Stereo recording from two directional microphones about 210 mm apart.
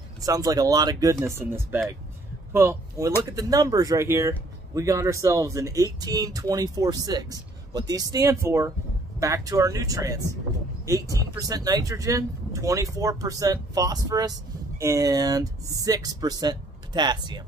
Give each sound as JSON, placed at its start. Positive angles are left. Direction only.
{"t": 0.2, "sound": "speech", "side_deg": -15}